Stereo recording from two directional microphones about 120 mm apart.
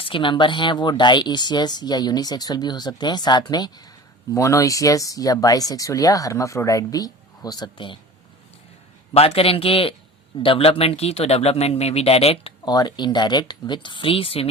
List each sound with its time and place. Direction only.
0.0 s speech: 45° left (ahead or behind)
9.1 s speech: 55° left (ahead or behind)
12.6 s speech: 35° left (ahead or behind)